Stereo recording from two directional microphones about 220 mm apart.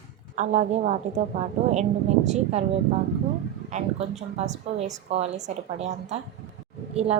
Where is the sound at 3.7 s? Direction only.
30° right (ahead or behind).